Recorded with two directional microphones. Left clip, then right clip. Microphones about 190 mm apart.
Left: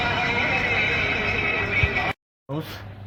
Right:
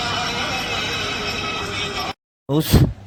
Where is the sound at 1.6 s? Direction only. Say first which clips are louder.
Left 2 dB; 10° right (ahead or behind).